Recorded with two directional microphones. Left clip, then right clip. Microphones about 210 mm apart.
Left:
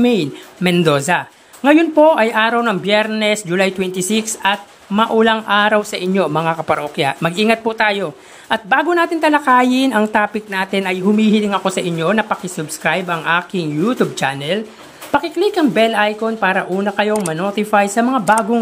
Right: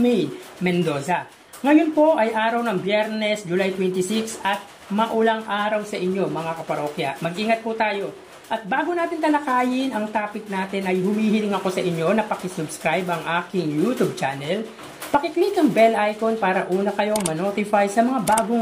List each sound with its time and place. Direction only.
0.0 s speech: 25° left (ahead or behind)